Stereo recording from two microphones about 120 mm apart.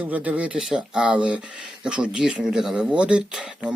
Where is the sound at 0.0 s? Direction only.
10° right (ahead or behind).